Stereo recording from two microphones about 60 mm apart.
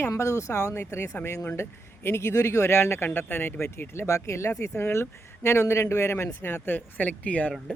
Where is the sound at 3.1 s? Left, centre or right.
Left.